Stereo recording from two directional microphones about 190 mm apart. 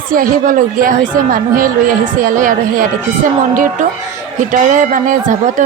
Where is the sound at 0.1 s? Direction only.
45° right (ahead or behind).